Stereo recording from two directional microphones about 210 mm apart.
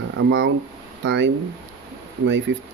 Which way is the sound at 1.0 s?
60° right (ahead or behind).